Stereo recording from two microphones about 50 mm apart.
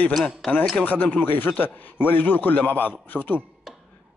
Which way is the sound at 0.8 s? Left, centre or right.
Left.